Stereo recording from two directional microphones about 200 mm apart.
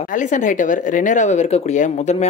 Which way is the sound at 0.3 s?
40° left (ahead or behind).